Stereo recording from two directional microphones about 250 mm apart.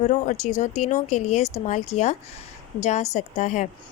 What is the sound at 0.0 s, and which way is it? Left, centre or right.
Speech, left.